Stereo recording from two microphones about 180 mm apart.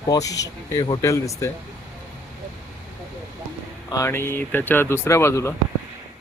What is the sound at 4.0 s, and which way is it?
Speech, 15° left (ahead or behind).